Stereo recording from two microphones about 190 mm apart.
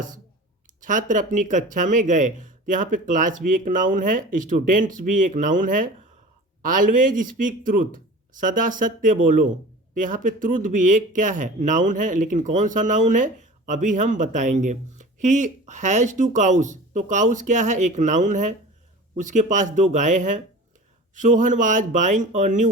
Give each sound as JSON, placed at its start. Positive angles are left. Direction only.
{"t": 0.9, "sound": "speech", "side_deg": -45}